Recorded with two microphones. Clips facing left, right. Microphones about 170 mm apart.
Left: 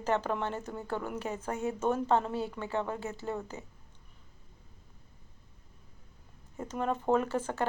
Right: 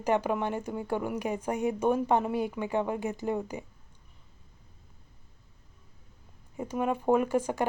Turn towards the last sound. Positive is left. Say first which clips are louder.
# right 4 dB
turn(degrees=-15)  # may be behind; listen again after turning